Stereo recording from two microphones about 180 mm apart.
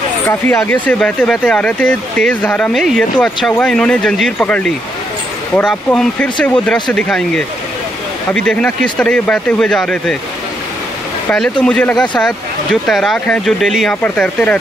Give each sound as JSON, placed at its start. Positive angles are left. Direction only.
{"t": 0.3, "sound": "speech", "side_deg": 15}
{"t": 5.9, "sound": "speech", "side_deg": 5}
{"t": 11.2, "sound": "speech", "side_deg": 5}